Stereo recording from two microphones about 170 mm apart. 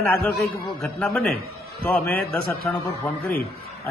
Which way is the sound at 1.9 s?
10° left (ahead or behind).